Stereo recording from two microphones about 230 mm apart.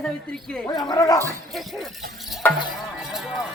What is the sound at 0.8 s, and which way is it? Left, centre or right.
Speech, centre.